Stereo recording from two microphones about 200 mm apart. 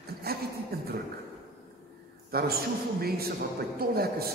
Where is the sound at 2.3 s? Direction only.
50° right (ahead or behind).